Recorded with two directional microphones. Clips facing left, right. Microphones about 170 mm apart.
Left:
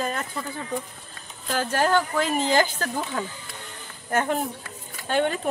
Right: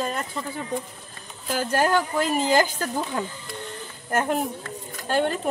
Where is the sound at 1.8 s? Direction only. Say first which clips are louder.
Left 1 dB; 10° right (ahead or behind).